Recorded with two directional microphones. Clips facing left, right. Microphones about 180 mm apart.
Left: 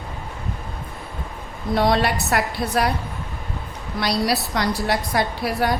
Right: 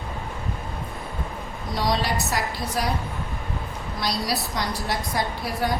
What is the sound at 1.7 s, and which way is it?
A woman's voice, 60° left (ahead or behind).